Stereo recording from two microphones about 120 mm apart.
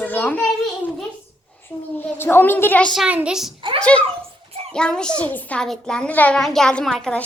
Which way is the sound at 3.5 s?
45° right (ahead or behind).